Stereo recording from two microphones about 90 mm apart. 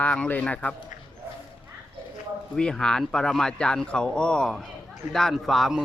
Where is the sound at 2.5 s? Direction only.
10° left (ahead or behind).